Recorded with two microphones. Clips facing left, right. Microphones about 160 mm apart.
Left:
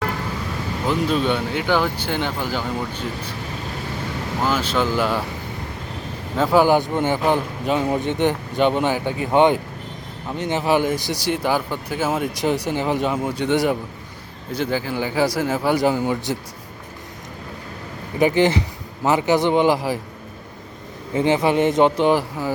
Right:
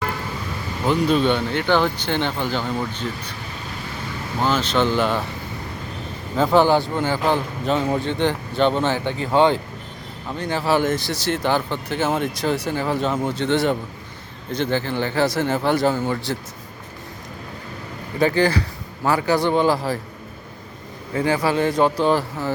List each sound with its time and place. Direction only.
0.9 s speech: centre (ahead or behind)
4.4 s speech: 5° left (ahead or behind)
6.3 s speech: 5° left (ahead or behind)
18.2 s speech: 20° left (ahead or behind)
21.1 s speech: 20° left (ahead or behind)